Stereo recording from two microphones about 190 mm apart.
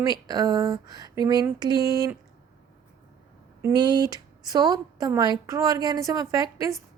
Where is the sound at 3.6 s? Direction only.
20° right (ahead or behind).